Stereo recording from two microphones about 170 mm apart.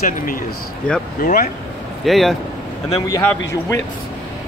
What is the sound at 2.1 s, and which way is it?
Speech, centre (ahead or behind).